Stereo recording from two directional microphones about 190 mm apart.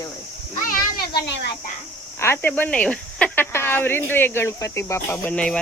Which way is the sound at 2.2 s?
10° left (ahead or behind).